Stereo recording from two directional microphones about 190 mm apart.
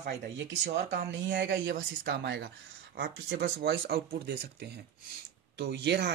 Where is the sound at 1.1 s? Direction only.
70° right (ahead or behind).